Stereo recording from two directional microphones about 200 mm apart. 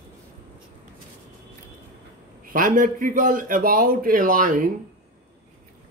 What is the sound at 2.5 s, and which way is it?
A man's voice, 45° right (ahead or behind).